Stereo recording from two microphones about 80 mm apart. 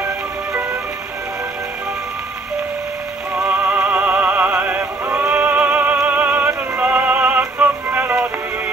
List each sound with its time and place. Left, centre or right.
3.3 s music: centre